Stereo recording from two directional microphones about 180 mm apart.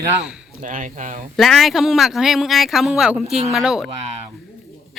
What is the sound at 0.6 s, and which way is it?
Speech, 45° right (ahead or behind).